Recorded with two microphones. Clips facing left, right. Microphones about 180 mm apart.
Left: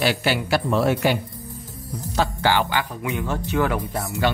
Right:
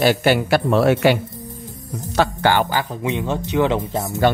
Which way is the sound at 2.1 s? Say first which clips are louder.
Right 4 dB; 50° right (ahead or behind).